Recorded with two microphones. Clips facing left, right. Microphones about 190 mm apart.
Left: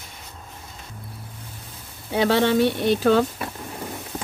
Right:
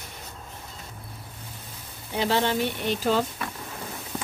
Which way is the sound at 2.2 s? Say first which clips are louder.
Left 6 dB; 70° left (ahead or behind).